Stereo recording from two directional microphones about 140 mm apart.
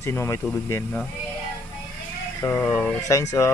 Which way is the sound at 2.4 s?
15° left (ahead or behind).